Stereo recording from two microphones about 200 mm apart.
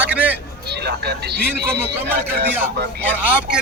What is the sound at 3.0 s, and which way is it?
Speech, 5° right (ahead or behind).